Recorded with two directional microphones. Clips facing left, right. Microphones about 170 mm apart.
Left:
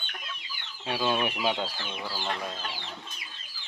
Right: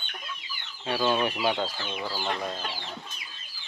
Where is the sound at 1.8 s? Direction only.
25° right (ahead or behind).